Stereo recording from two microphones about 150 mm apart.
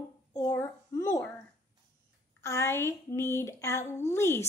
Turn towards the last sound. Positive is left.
turn(degrees=15)  # may be behind; listen again after turning